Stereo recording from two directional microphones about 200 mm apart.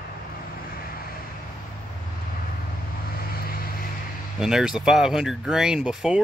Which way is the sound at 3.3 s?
50° left (ahead or behind).